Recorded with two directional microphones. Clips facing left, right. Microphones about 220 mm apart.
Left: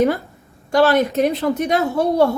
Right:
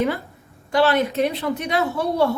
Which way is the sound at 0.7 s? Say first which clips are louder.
Left 3 dB; 45° left (ahead or behind).